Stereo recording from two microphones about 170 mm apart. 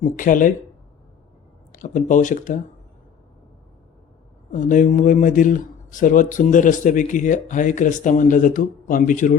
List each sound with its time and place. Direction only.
0.0 s speech: 50° left (ahead or behind)
1.7 s speech: 50° left (ahead or behind)
4.5 s speech: 50° left (ahead or behind)